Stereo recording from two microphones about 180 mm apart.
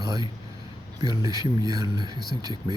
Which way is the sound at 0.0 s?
20° right (ahead or behind).